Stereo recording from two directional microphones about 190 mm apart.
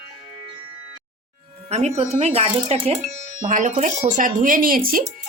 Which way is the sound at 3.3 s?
45° right (ahead or behind).